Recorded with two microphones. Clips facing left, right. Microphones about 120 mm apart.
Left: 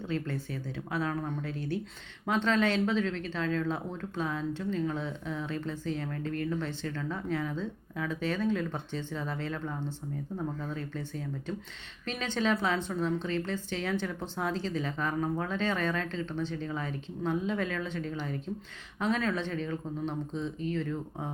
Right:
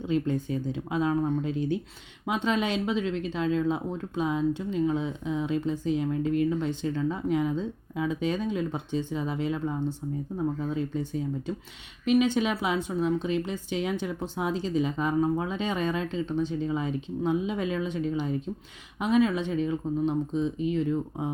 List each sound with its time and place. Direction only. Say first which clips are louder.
0.0 s speech: right 7 dB; 15° right (ahead or behind)